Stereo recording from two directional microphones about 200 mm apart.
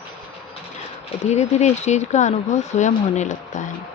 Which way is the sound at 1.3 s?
35° left (ahead or behind).